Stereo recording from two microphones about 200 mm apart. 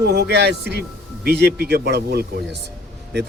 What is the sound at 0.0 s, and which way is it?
Speech, 55° right (ahead or behind).